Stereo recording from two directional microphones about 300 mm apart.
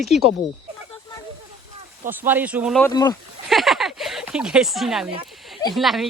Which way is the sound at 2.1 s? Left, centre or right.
Centre.